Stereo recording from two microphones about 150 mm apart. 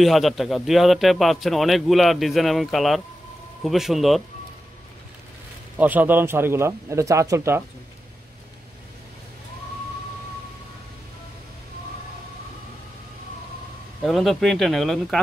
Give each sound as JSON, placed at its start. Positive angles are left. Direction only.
{"t": 0.0, "sound": "speech", "side_deg": 0}
{"t": 5.8, "sound": "speech", "side_deg": -10}
{"t": 14.0, "sound": "speech", "side_deg": 0}